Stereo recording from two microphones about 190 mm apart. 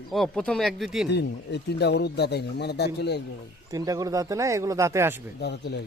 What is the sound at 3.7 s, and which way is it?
Speech, 20° right (ahead or behind).